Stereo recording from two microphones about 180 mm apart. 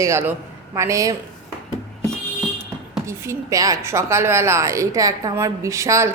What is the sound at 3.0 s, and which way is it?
A woman's voice, 15° right (ahead or behind).